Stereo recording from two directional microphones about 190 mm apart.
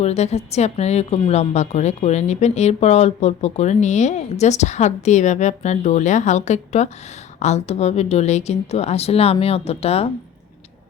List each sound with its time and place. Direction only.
0.0 s a woman's voice: 35° left (ahead or behind)